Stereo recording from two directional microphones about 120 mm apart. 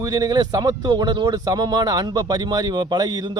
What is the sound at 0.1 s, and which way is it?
A man's voice, 35° right (ahead or behind).